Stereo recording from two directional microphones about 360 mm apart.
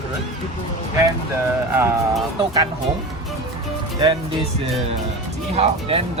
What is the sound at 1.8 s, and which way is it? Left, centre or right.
Speech, centre.